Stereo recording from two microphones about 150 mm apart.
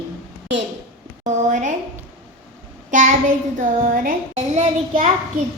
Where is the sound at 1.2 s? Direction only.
55° right (ahead or behind).